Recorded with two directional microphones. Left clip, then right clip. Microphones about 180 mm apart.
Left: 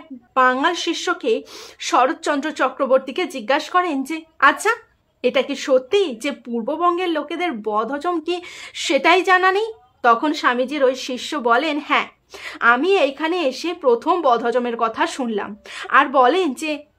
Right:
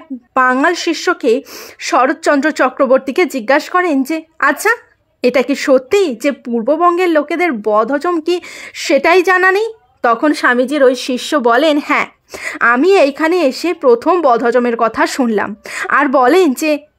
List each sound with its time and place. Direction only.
0.3 s a woman's voice: 45° right (ahead or behind)
0.6 s speech: 35° right (ahead or behind)